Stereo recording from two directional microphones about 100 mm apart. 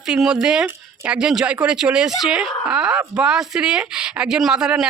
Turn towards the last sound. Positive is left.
turn(degrees=-5)  # may be behind; listen again after turning